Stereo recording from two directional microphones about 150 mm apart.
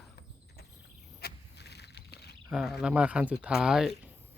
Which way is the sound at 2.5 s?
Centre (ahead or behind).